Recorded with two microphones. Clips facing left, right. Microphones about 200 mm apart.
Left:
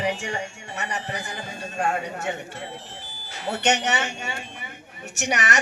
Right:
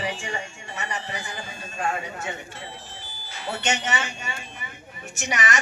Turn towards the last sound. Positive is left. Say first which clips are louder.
# left 2 dB
turn(degrees=65)  # may be behind; listen again after turning